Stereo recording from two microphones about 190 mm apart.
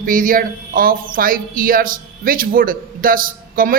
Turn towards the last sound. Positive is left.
turn(degrees=-50)  # may be behind; listen again after turning